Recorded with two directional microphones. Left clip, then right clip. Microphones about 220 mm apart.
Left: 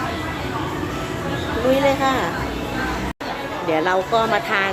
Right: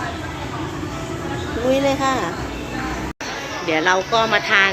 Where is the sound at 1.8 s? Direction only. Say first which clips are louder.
Left 1 dB; 20° right (ahead or behind).